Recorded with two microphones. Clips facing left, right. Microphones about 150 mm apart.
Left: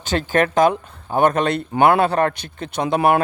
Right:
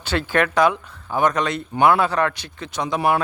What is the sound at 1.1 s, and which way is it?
A man's voice, 55° left (ahead or behind).